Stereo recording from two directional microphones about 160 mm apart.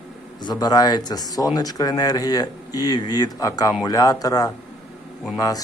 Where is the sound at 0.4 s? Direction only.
25° left (ahead or behind).